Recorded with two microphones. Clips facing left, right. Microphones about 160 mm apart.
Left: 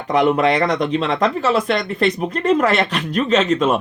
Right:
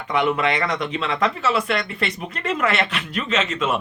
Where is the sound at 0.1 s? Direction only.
40° left (ahead or behind).